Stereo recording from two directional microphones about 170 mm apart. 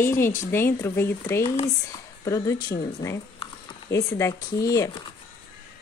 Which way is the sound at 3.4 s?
35° left (ahead or behind).